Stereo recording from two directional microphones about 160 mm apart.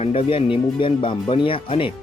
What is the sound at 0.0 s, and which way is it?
Speech, 40° left (ahead or behind).